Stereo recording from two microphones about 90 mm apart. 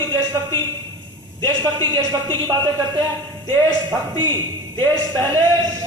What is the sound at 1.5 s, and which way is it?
A man's voice, 55° right (ahead or behind).